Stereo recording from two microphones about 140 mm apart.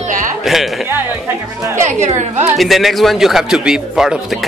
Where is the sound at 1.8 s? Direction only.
60° right (ahead or behind).